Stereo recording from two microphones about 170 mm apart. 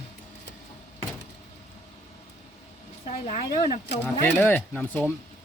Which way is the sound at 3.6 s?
50° left (ahead or behind).